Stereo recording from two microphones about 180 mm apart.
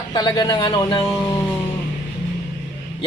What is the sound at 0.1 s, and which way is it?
Speech, 25° left (ahead or behind).